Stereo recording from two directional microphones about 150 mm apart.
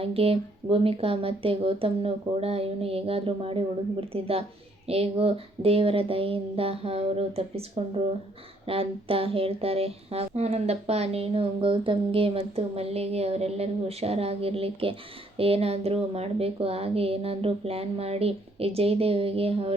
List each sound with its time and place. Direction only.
0.0 s speech: 40° right (ahead or behind)